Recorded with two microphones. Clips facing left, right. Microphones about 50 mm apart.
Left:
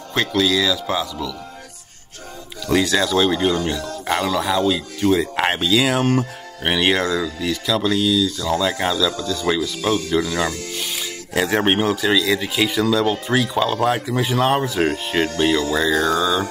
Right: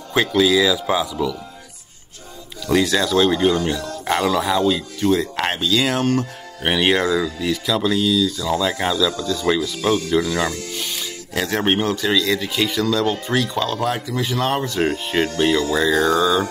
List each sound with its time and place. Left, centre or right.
0.1 s speech: centre
2.6 s speech: centre